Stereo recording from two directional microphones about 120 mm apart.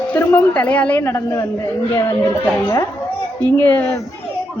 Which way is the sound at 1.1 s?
25° left (ahead or behind).